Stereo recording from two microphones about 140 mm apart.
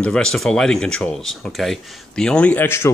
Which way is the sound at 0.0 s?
5° left (ahead or behind).